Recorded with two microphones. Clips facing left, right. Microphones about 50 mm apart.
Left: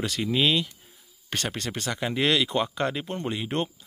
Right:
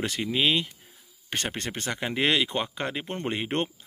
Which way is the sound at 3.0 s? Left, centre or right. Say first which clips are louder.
Even; right.